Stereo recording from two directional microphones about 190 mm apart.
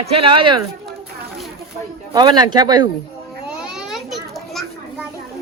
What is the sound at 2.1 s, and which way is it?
Speech, 20° right (ahead or behind).